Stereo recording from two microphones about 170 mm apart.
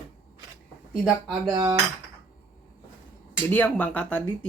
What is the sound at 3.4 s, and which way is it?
Speech, 10° left (ahead or behind).